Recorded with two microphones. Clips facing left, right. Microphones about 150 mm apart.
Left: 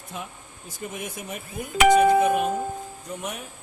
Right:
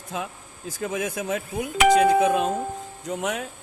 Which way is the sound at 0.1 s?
90° right.